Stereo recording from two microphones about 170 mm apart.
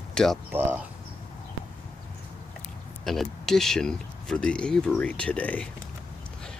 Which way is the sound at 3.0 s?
Centre (ahead or behind).